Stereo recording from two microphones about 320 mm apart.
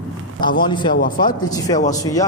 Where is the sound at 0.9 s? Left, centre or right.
Left.